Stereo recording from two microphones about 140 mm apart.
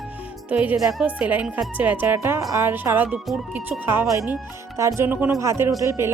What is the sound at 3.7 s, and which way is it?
Speech, 15° right (ahead or behind).